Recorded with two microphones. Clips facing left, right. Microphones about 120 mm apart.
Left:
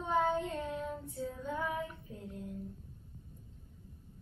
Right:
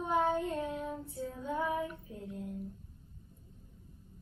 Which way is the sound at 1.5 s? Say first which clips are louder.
Right 4 dB; 25° right (ahead or behind).